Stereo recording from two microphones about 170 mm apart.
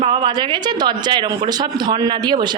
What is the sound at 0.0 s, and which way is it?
A woman's voice, 30° right (ahead or behind).